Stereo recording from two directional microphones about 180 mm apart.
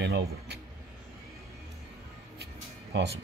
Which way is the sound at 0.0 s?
70° right (ahead or behind).